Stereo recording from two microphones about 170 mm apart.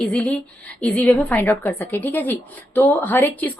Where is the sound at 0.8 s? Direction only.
5° left (ahead or behind).